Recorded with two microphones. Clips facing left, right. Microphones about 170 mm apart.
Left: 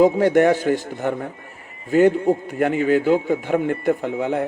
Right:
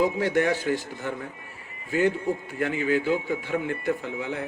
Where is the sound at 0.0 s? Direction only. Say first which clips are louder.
Left 8 dB; 45° left (ahead or behind).